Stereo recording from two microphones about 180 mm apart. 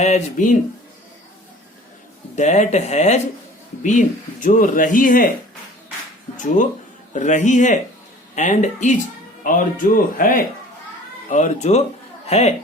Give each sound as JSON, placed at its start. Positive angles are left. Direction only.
{"t": 0.0, "sound": "speech", "side_deg": 40}
{"t": 2.3, "sound": "speech", "side_deg": 40}
{"t": 6.3, "sound": "speech", "side_deg": 45}